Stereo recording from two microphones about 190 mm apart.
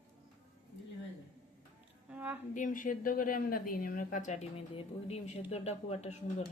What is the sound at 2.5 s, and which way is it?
A woman's voice, 45° left (ahead or behind).